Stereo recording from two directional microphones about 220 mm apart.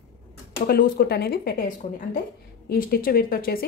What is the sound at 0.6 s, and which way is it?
Speech, 45° left (ahead or behind).